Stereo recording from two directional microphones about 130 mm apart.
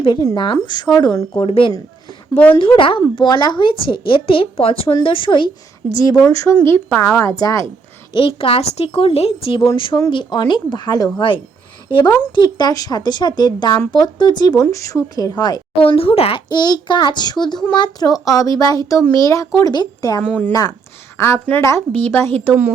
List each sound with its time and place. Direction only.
0.3 s a woman's voice: 40° left (ahead or behind)
0.9 s speech: 25° left (ahead or behind)
1.4 s a woman's voice: 45° left (ahead or behind); by 7.0 s 15° left (ahead or behind)
7.2 s speech: 25° left (ahead or behind)
8.1 s a woman's voice: 45° left (ahead or behind)
15.8 s a woman's voice: 45° left (ahead or behind)
16.5 s a woman's voice: 35° left (ahead or behind)
20.2 s speech: 10° left (ahead or behind)
20.5 s speech: 30° left (ahead or behind)
21.2 s speech: 20° left (ahead or behind)